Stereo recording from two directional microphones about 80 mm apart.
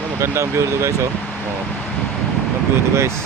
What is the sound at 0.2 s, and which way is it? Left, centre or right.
Speech, right.